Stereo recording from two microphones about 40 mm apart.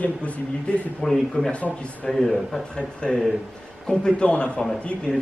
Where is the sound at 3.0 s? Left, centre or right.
Left.